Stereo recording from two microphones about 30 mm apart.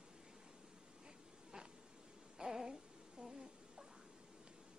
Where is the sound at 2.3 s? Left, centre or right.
Centre.